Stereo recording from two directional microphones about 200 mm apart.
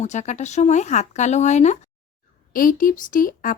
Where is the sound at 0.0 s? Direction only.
35° left (ahead or behind).